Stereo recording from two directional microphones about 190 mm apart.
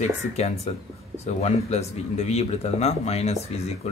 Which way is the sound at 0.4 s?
35° left (ahead or behind).